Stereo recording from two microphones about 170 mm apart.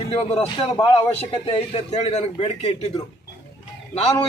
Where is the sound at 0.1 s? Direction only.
35° left (ahead or behind).